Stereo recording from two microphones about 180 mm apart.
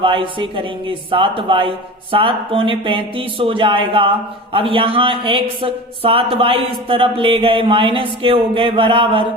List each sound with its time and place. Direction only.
0.0 s speech: 30° right (ahead or behind)